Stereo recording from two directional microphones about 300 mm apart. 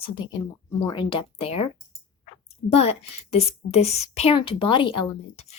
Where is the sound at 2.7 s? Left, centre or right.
Left.